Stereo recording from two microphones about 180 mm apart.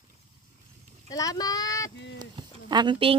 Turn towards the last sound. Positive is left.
turn(degrees=-30)  # may be behind; listen again after turning